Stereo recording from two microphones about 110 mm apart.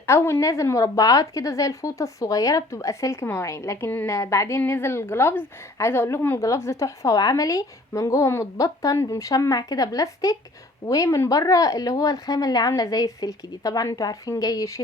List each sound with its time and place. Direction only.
0.1 s speech: 25° left (ahead or behind)